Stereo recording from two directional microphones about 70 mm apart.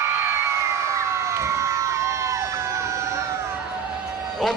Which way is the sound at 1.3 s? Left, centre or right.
Right.